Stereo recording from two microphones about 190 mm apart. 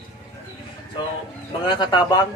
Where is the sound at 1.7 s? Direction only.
25° left (ahead or behind).